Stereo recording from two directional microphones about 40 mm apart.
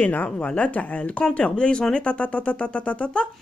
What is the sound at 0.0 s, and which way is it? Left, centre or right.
Speech, left.